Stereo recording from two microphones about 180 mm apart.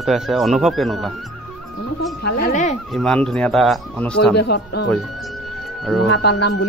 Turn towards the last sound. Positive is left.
turn(degrees=65)  # may be behind; listen again after turning